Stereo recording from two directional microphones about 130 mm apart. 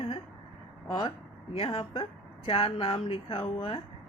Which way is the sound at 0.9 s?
35° left (ahead or behind).